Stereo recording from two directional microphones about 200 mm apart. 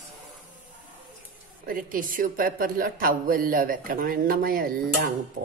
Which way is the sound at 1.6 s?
45° right (ahead or behind).